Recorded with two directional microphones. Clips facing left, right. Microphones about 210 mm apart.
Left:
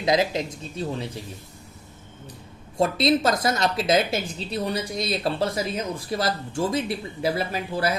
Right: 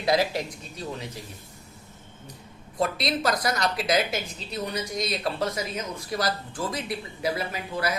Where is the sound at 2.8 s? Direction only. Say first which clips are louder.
Left 6 dB; 25° left (ahead or behind).